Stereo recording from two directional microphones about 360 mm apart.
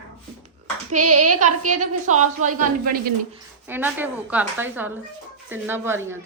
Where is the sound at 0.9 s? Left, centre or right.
Right.